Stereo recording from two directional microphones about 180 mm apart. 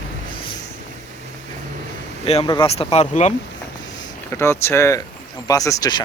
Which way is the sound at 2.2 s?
30° left (ahead or behind).